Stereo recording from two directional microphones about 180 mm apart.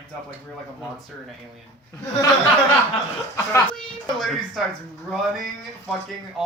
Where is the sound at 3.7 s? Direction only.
Centre (ahead or behind).